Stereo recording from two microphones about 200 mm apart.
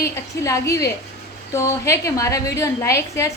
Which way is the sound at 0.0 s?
15° left (ahead or behind).